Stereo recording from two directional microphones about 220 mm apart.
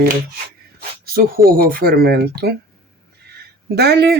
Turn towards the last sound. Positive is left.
turn(degrees=-50)  # may be behind; listen again after turning